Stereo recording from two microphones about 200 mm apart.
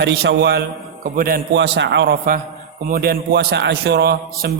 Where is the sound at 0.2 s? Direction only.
55° right (ahead or behind).